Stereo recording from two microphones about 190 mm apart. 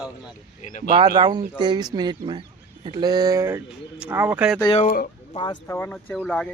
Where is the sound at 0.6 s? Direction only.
40° left (ahead or behind).